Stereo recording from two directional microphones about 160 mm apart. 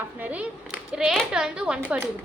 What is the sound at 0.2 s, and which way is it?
A woman's voice, 10° right (ahead or behind).